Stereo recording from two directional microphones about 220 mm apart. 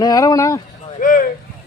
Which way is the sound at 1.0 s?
40° left (ahead or behind).